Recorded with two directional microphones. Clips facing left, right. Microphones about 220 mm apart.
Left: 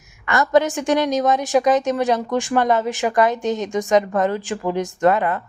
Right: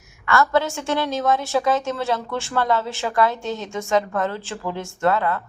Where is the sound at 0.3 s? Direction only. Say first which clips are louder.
Left 3 dB; 20° left (ahead or behind).